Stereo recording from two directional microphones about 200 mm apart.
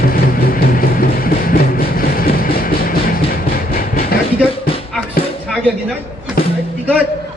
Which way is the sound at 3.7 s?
45° left (ahead or behind).